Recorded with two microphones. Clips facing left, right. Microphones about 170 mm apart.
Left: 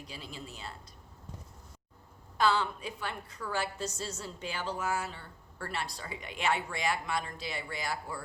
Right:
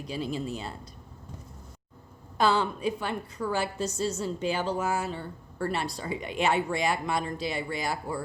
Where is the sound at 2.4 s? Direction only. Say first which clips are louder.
Right 4 dB; 20° right (ahead or behind).